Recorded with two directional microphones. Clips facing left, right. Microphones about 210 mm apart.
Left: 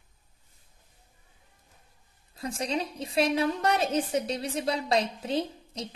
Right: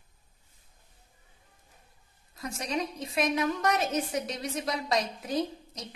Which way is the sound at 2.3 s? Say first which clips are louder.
Left 2 dB; 30° left (ahead or behind).